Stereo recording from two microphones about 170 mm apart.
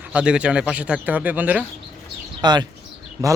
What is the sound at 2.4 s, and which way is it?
Speech, 25° right (ahead or behind).